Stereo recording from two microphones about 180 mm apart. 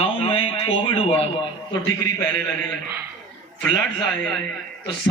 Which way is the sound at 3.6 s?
Centre (ahead or behind).